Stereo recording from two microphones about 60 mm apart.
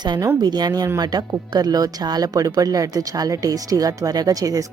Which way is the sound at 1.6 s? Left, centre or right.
Right.